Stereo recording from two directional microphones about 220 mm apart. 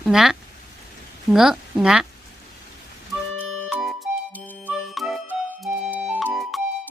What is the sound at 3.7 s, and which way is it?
Music, centre (ahead or behind).